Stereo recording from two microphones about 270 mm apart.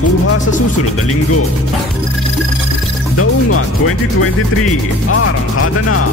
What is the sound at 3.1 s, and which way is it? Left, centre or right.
Speech, left.